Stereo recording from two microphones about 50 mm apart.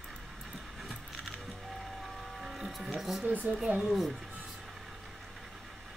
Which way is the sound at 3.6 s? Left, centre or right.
Right.